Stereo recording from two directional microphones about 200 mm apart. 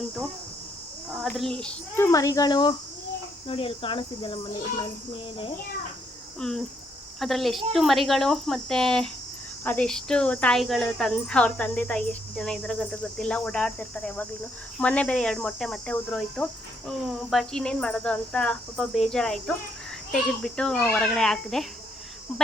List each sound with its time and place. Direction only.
1.2 s cricket: centre (ahead or behind)
2.0 s a child's voice: 15° left (ahead or behind)
6.4 s cricket: centre (ahead or behind)